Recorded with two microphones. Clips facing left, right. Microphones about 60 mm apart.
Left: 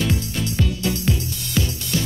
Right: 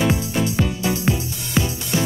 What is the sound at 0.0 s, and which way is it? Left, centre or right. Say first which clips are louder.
Music: right 4 dB; right.